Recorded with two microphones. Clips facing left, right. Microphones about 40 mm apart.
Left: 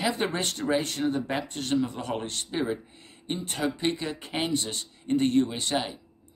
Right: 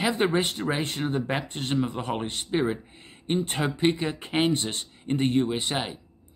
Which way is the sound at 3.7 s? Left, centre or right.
Right.